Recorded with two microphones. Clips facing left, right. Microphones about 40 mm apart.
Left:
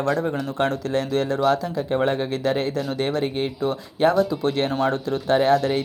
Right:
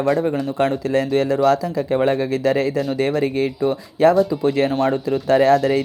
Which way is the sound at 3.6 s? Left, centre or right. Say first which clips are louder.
Right 4 dB; right.